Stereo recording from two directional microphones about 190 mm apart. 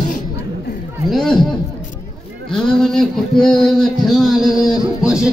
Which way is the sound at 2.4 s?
5° left (ahead or behind).